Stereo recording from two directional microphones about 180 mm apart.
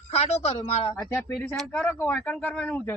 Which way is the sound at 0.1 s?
35° left (ahead or behind).